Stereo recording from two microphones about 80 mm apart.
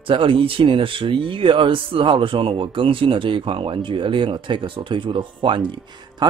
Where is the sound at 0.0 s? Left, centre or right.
Right.